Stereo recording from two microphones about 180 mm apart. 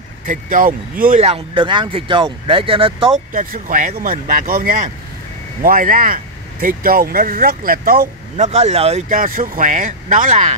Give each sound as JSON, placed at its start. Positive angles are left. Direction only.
{"t": 0.3, "sound": "speech", "side_deg": -50}
{"t": 1.2, "sound": "speech", "side_deg": -30}
{"t": 3.3, "sound": "speech", "side_deg": -50}
{"t": 8.4, "sound": "speech", "side_deg": -40}
{"t": 9.1, "sound": "speech", "side_deg": -50}